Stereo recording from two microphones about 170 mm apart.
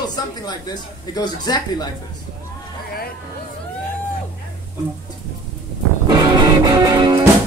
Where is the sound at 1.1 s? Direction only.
25° left (ahead or behind).